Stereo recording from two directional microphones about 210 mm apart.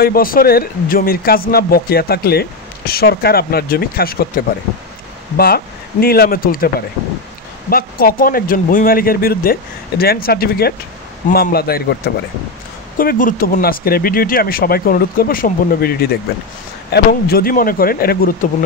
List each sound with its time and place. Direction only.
0.0 s speech: 45° left (ahead or behind)
7.7 s speech: 45° left (ahead or behind)